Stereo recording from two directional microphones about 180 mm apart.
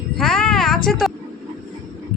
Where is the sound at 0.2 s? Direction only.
5° left (ahead or behind).